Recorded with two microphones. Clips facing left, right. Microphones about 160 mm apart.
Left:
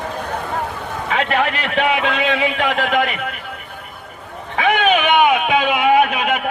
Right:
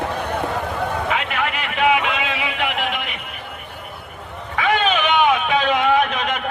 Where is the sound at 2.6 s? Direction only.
90° left.